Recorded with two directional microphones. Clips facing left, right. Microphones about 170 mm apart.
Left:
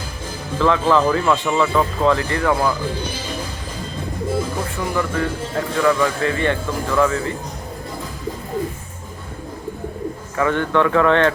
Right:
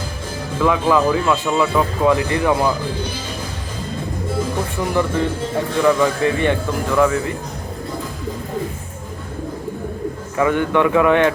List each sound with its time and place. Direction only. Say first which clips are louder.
0.6 s speech: even; 10° right (ahead or behind)
4.9 s speech: right 3 dB; 20° right (ahead or behind)
10.3 s speech: right 1 dB; 15° right (ahead or behind)